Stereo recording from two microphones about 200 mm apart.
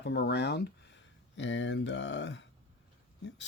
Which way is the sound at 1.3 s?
65° left (ahead or behind).